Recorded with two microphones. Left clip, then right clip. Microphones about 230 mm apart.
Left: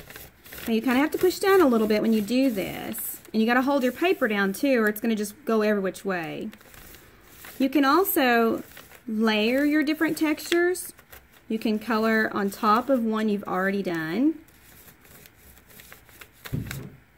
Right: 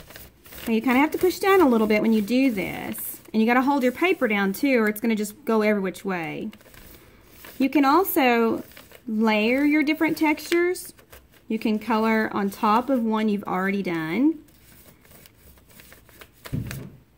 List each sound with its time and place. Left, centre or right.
0.7 s speech: right
7.5 s speech: centre
11.4 s speech: centre